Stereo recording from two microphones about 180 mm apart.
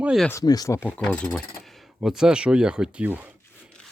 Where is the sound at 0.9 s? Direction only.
5° left (ahead or behind).